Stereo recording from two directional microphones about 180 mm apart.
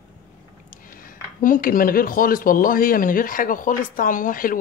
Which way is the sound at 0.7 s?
50° left (ahead or behind).